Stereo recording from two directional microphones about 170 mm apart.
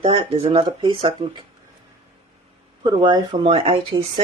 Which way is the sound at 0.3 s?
35° right (ahead or behind).